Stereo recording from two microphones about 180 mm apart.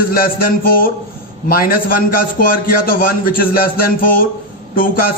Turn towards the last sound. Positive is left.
turn(degrees=50)  # may be behind; listen again after turning